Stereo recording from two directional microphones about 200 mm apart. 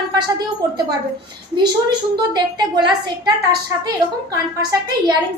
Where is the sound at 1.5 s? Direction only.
20° right (ahead or behind).